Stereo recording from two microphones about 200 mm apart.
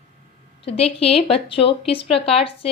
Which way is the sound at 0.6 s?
30° left (ahead or behind).